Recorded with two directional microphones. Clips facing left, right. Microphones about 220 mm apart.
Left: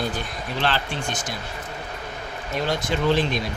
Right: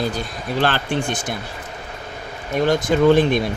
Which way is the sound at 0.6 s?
50° right (ahead or behind).